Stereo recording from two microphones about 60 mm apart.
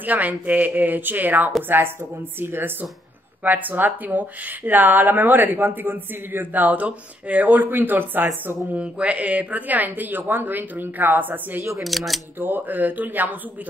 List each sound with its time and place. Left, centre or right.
0.0 s speech: right
8.6 s speech: right
11.8 s speech: centre
12.4 s speech: right